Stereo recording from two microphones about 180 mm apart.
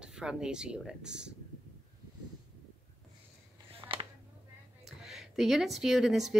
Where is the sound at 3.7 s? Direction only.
30° right (ahead or behind).